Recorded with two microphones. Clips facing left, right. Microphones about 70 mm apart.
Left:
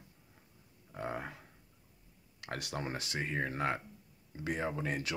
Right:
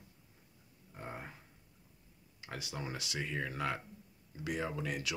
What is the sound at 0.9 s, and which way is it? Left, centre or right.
Speech, left.